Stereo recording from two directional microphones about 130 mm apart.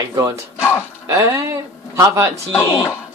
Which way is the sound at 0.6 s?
20° left (ahead or behind).